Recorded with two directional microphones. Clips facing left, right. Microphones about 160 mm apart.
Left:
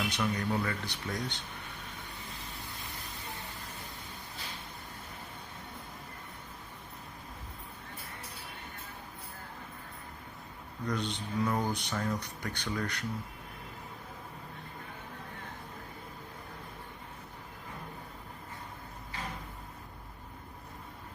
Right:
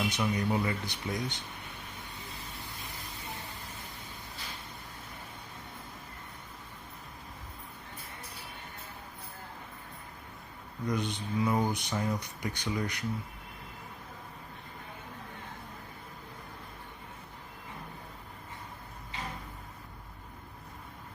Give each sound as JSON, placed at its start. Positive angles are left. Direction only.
{"t": 0.0, "sound": "speech", "side_deg": -15}
{"t": 10.8, "sound": "speech", "side_deg": -10}